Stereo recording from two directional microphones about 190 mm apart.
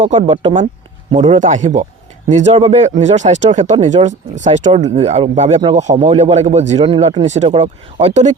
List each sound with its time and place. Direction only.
0.2 s speech: 25° right (ahead or behind)
1.1 s speech: 40° right (ahead or behind)